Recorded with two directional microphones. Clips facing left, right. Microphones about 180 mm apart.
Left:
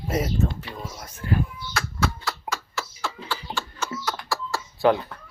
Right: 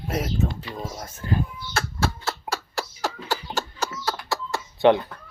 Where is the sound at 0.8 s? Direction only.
40° right (ahead or behind).